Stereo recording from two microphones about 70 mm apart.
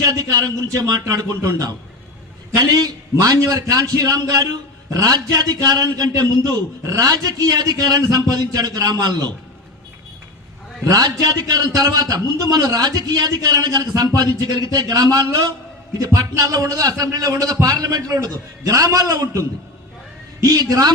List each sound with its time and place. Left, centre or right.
0.3 s a man's voice: right
3.2 s a man's voice: right
10.8 s a man's voice: right